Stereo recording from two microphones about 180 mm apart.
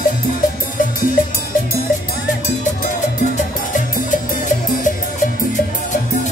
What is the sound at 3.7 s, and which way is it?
Music, 45° left (ahead or behind).